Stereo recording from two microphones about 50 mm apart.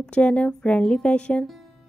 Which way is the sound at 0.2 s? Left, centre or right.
Left.